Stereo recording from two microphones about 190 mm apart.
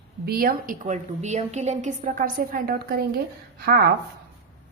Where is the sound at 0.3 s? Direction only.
50° right (ahead or behind).